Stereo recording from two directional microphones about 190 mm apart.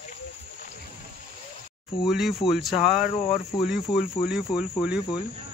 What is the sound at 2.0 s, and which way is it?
Cricket, centre (ahead or behind).